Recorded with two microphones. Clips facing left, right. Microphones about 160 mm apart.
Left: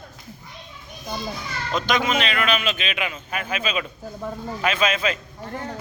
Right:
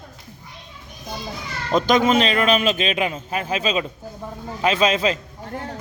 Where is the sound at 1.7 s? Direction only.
35° right (ahead or behind).